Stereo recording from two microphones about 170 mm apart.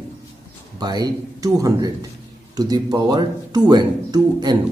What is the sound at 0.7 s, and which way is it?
Speech, 25° right (ahead or behind).